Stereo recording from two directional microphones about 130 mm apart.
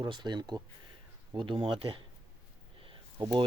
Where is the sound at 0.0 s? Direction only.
35° right (ahead or behind).